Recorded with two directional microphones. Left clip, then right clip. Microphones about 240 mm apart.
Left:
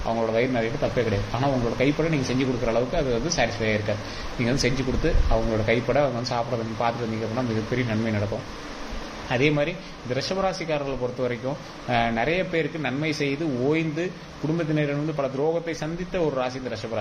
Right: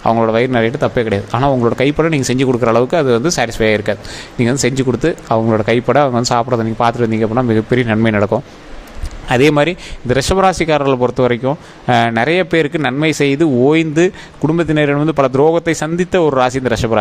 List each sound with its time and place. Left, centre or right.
0.1 s a man's voice: right
9.3 s a man's voice: right